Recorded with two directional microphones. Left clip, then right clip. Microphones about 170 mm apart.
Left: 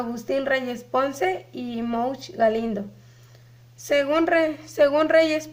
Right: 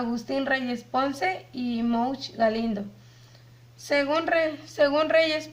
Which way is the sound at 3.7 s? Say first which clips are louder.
Left 3 dB; 40° left (ahead or behind).